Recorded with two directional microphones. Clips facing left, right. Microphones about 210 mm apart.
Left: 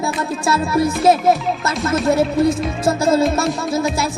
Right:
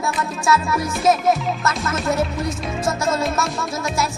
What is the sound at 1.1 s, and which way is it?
Speech, 30° left (ahead or behind).